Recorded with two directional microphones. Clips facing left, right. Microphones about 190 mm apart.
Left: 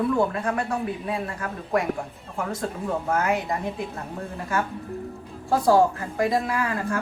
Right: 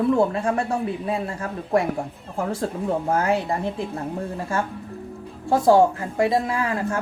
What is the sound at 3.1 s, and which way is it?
A woman's voice, 30° right (ahead or behind).